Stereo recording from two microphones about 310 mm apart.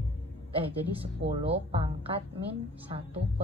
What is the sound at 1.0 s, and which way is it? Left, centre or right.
A woman's voice, centre.